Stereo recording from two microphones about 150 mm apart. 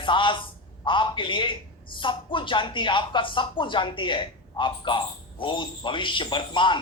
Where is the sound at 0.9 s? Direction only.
35° left (ahead or behind).